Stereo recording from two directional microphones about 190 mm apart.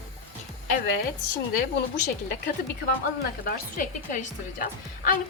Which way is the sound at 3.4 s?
40° left (ahead or behind).